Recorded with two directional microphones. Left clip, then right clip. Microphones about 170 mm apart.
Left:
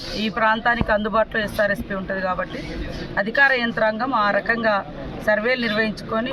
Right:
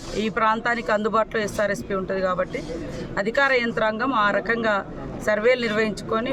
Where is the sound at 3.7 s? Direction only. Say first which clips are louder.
Left 2 dB; 35° right (ahead or behind).